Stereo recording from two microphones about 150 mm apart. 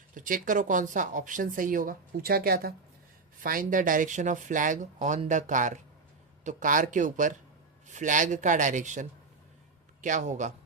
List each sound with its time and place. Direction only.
0.1 s speech: 65° right (ahead or behind); by 2.7 s 85° right
3.4 s a man's voice: 65° right (ahead or behind)